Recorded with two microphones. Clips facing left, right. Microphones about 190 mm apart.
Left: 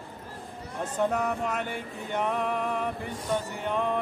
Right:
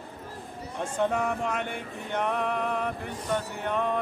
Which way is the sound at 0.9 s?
Centre (ahead or behind).